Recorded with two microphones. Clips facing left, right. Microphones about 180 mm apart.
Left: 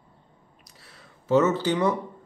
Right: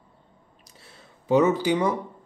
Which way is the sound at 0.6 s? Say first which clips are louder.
Right 3 dB; 25° right (ahead or behind).